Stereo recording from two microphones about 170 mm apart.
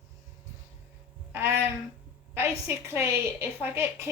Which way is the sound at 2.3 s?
15° right (ahead or behind).